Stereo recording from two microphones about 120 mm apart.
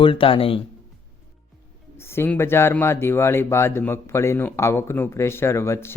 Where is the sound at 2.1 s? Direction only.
20° left (ahead or behind).